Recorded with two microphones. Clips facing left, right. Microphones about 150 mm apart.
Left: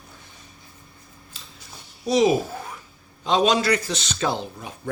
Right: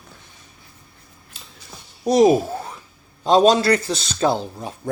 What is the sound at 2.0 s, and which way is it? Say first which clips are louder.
Speech: right 5 dB; 45° right (ahead or behind).